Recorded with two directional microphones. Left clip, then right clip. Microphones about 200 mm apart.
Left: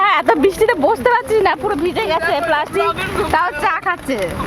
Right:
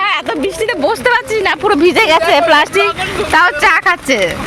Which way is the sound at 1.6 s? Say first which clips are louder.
Right 8 dB; 15° right (ahead or behind).